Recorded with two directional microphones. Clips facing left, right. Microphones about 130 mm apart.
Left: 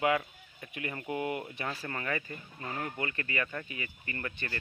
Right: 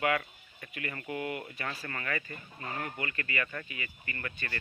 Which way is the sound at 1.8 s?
15° left (ahead or behind).